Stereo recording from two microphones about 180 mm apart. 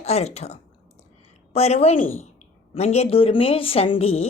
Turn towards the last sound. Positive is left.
turn(degrees=35)  # may be behind; listen again after turning